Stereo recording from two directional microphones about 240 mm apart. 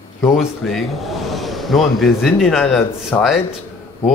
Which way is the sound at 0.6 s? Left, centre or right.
Centre.